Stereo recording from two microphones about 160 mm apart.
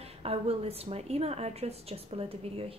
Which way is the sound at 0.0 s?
40° right (ahead or behind).